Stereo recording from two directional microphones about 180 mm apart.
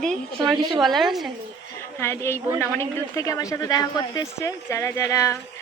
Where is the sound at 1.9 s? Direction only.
15° left (ahead or behind).